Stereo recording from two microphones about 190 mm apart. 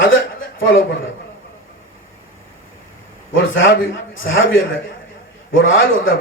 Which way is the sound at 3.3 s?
90° left.